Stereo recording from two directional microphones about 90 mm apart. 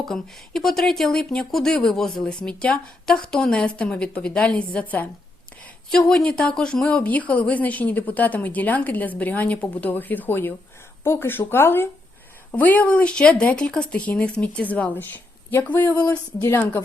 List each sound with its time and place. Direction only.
0.1 s speech: 5° left (ahead or behind); by 16.0 s 20° left (ahead or behind)
16.0 s speech: 35° left (ahead or behind)